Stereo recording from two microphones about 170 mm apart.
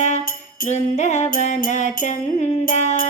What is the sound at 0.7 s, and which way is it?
Music, 45° left (ahead or behind).